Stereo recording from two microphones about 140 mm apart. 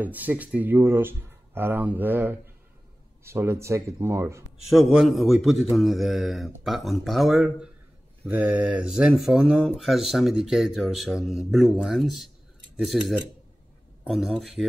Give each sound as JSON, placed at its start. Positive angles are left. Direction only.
{"t": 0.0, "sound": "speech", "side_deg": -10}
{"t": 4.6, "sound": "a man's voice", "side_deg": 0}
{"t": 14.0, "sound": "a man's voice", "side_deg": 0}